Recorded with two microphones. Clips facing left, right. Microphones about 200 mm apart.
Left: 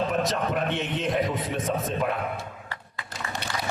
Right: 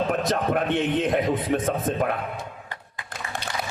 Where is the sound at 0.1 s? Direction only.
55° right (ahead or behind).